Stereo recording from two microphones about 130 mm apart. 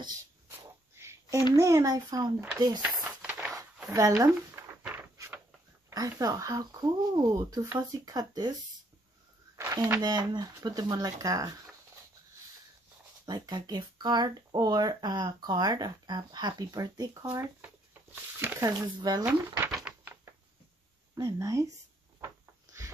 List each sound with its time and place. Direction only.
0.9 s a sound: 20° right (ahead or behind)
1.5 s speech: 25° right (ahead or behind)
2.8 s a sound: 10° right (ahead or behind)
3.9 s speech: 25° right (ahead or behind)
5.9 s speech: 25° right (ahead or behind)
9.6 s speech: 25° right (ahead or behind)
13.2 s speech: 35° right (ahead or behind)
18.4 s speech: 15° right (ahead or behind)
18.8 s speech: 35° right (ahead or behind)
19.2 s speech: 20° right (ahead or behind)
21.1 s speech: 25° right (ahead or behind)
22.2 s a sound: 25° right (ahead or behind)